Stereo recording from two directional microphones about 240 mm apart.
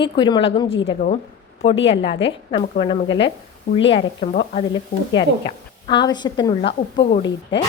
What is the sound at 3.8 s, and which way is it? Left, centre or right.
Speech, left.